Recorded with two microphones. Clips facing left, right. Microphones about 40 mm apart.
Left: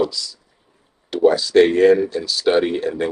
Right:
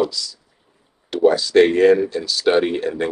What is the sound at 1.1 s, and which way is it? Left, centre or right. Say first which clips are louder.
Speech: even; centre.